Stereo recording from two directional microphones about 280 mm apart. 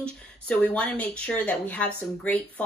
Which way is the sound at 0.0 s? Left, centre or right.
Centre.